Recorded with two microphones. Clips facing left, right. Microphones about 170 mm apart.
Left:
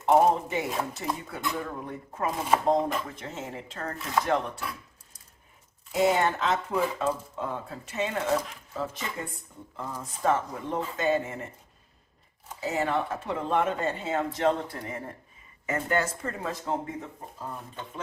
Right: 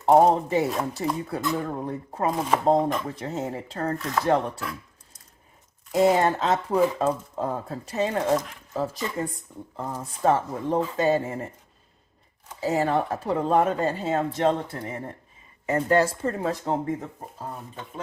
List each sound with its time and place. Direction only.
0.0 s speech: 35° right (ahead or behind)
5.9 s speech: 35° right (ahead or behind)
12.5 s speech: 35° right (ahead or behind)